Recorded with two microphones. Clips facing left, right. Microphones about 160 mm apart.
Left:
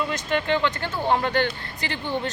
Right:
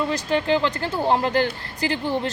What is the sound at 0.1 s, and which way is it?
Speech, 35° right (ahead or behind).